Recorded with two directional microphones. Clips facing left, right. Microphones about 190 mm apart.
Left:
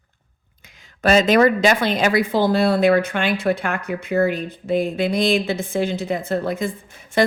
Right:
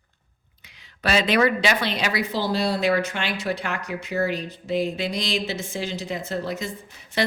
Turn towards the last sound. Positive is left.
turn(degrees=50)  # may be behind; listen again after turning